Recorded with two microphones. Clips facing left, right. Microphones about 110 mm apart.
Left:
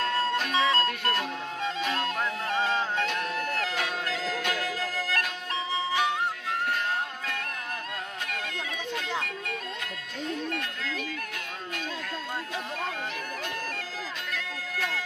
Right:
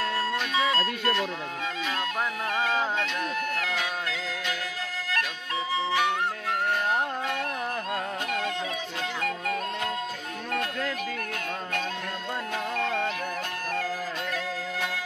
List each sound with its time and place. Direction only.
3.1 s music: 35° left (ahead or behind)
12.8 s music: 70° right (ahead or behind)